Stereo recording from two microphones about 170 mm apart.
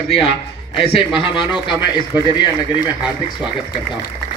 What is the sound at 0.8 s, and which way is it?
Speech, 35° left (ahead or behind).